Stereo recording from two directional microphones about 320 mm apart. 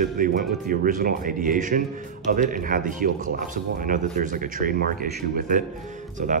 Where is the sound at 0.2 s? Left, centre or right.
Right.